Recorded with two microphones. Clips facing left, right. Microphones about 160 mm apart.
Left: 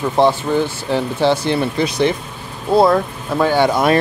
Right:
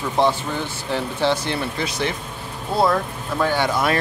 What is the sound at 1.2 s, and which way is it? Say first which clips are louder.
Speech: left 6 dB; 15° left (ahead or behind).